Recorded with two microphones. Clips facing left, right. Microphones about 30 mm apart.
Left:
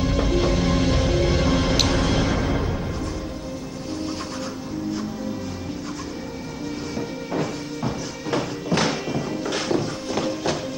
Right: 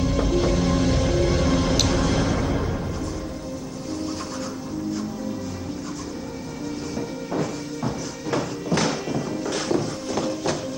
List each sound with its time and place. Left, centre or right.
0.0 s music: left
7.0 s music: centre